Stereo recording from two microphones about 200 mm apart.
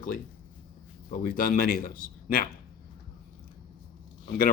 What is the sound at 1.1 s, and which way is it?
Speech, 45° left (ahead or behind).